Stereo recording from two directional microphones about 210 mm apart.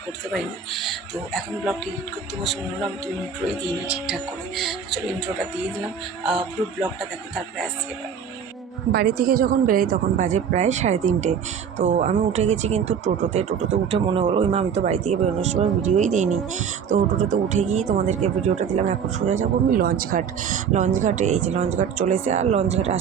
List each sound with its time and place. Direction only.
0.3 s speech: centre (ahead or behind)
3.8 s speech: 5° right (ahead or behind)
8.9 s speech: 45° right (ahead or behind); by 23.0 s 30° right (ahead or behind)